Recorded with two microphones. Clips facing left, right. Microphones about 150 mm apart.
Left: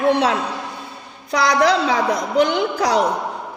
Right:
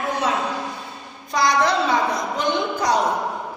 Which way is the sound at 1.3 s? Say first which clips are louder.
Left 3 dB; 80° left.